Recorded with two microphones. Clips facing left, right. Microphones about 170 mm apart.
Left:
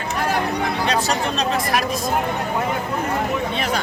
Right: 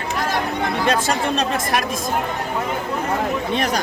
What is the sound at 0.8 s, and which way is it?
Speech, 50° right (ahead or behind).